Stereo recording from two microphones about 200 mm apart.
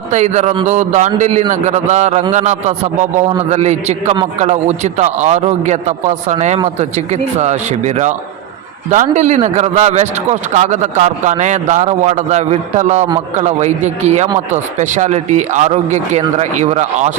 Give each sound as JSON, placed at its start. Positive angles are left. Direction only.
{"t": 0.1, "sound": "speech", "side_deg": -35}